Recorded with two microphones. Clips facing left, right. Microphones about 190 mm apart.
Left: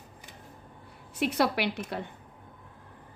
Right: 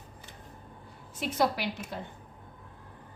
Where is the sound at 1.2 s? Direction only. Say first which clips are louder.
Left 2 dB; 65° left (ahead or behind).